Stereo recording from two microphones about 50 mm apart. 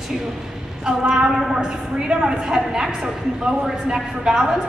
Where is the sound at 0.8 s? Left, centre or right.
Centre.